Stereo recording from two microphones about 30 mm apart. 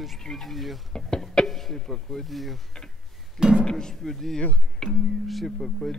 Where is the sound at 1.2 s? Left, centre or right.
Left.